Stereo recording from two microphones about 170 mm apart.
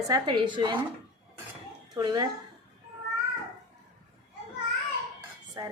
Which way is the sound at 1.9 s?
25° right (ahead or behind).